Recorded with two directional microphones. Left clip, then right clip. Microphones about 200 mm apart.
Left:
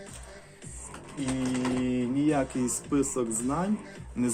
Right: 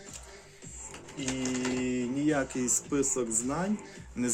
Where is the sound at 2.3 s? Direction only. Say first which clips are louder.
Left 1 dB; centre (ahead or behind).